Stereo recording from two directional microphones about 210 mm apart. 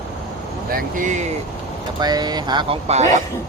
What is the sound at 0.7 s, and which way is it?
Speech, 35° right (ahead or behind).